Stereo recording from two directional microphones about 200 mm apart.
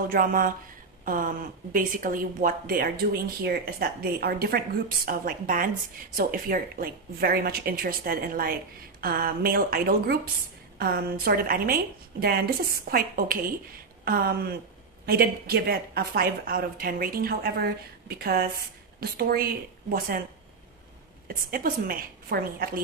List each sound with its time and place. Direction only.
0.1 s speech: 45° right (ahead or behind)
21.3 s speech: 45° right (ahead or behind)